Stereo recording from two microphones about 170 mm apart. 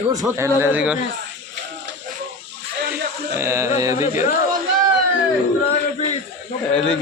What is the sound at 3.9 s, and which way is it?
Speech, 45° left (ahead or behind).